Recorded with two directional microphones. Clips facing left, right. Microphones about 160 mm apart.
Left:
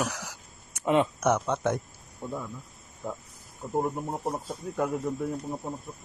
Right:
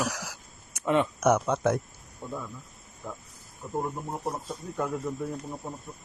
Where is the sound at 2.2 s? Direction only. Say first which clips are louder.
Left 2 dB; 15° left (ahead or behind).